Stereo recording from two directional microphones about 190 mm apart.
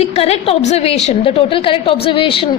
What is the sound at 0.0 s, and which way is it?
A woman's voice, 35° left (ahead or behind).